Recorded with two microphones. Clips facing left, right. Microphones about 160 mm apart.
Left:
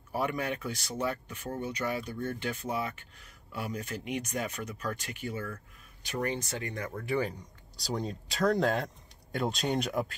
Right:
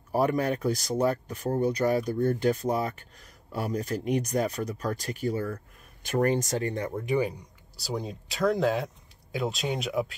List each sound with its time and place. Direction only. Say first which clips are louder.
0.1 s speech: right 7 dB; 40° right (ahead or behind)
6.0 s speech: right 8 dB; 45° right (ahead or behind); by 7.0 s 30° right (ahead or behind)
7.0 s speech: right 3 dB; 15° right (ahead or behind)